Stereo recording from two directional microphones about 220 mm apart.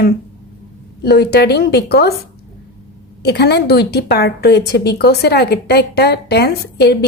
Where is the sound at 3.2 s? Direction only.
50° left (ahead or behind).